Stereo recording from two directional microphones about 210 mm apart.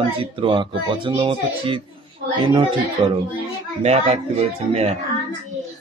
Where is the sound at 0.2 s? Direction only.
25° right (ahead or behind).